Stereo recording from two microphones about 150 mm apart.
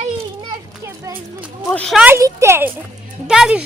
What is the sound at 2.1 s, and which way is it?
Speech, 20° right (ahead or behind).